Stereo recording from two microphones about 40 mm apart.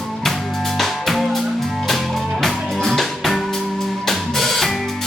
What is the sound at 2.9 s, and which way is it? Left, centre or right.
Music, centre.